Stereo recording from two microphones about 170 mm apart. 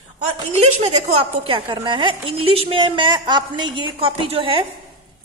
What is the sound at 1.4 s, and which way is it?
Speech, 30° right (ahead or behind).